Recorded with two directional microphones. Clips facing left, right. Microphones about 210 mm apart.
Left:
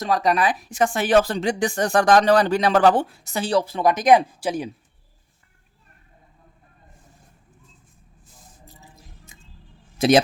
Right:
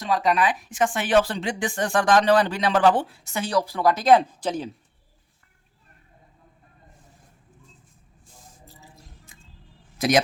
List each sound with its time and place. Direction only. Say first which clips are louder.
0.0 s speech: left 2 dB; 40° left (ahead or behind); by 4.7 s 10° left (ahead or behind)
9.3 s vehicle: left 2 dB; 20° left (ahead or behind)
10.0 s a man's voice: left 6 dB; 25° left (ahead or behind)